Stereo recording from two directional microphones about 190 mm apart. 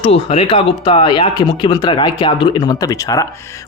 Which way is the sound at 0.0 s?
30° left (ahead or behind).